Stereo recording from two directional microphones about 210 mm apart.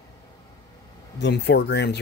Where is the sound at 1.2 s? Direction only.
55° left (ahead or behind).